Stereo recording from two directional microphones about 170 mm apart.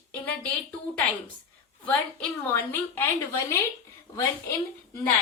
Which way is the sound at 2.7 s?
15° left (ahead or behind).